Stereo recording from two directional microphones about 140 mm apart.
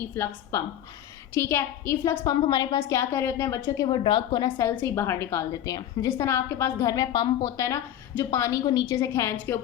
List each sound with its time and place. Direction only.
0.1 s a woman's voice: 20° left (ahead or behind)
3.8 s a woman's voice: 35° left (ahead or behind)
4.4 s a woman's voice: 15° left (ahead or behind)